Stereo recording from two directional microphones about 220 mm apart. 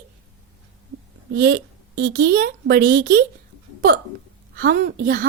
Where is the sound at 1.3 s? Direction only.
45° right (ahead or behind).